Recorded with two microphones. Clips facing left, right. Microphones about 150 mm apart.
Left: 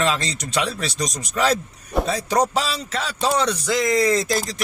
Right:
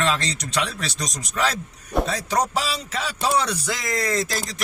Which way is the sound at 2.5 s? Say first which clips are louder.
Left 2 dB; 10° right (ahead or behind).